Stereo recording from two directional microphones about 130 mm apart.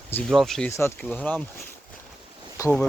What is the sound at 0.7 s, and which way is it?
Speech, 20° left (ahead or behind).